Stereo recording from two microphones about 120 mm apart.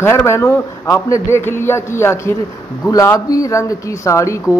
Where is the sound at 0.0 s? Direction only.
20° left (ahead or behind).